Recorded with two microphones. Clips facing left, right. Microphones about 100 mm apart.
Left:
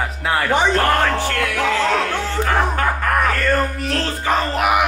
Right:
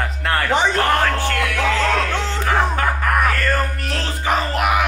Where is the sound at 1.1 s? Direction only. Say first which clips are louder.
Even; 15° left (ahead or behind).